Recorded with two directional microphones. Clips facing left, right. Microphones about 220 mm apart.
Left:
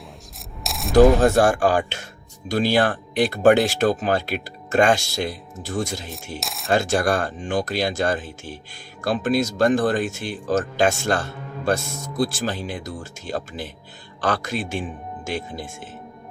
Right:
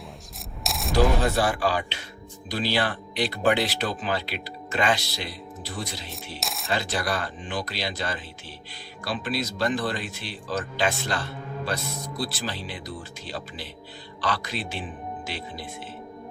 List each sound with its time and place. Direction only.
0.6 s a sound: centre (ahead or behind)
0.9 s speech: 50° left (ahead or behind)
6.4 s speech: centre (ahead or behind)
6.7 s speech: 45° left (ahead or behind)